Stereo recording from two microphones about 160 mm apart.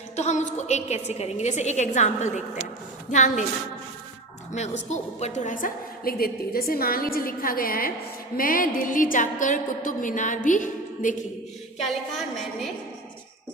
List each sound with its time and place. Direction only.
0.2 s a woman's voice: 45° left (ahead or behind)
4.5 s a woman's voice: 45° left (ahead or behind)